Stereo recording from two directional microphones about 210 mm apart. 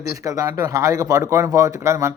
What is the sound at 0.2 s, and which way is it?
Speech, 15° right (ahead or behind).